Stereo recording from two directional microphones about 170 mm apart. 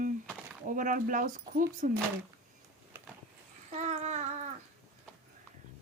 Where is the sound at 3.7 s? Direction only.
45° right (ahead or behind).